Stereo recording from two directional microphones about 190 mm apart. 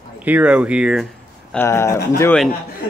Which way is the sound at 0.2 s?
10° right (ahead or behind).